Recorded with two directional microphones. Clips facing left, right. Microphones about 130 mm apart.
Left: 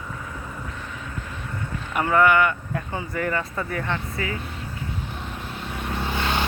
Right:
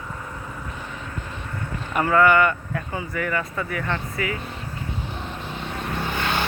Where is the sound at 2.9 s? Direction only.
30° left (ahead or behind).